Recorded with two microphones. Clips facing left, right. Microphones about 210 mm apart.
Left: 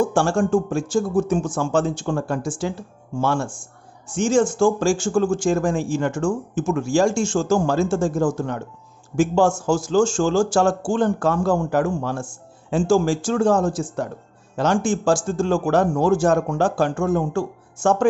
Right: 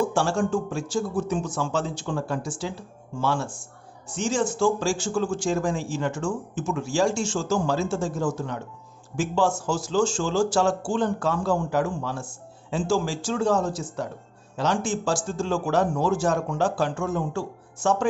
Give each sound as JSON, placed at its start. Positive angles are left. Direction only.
{"t": 0.0, "sound": "speech", "side_deg": 50}